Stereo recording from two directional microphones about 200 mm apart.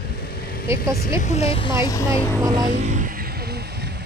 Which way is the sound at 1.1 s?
35° left (ahead or behind).